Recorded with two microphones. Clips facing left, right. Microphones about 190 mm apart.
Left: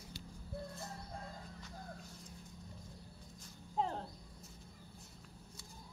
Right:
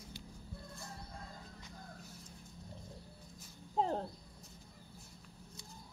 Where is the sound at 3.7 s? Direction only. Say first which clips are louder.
Right 3 dB; 35° right (ahead or behind).